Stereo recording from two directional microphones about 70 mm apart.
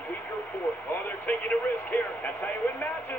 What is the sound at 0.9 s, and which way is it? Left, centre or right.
Speech, left.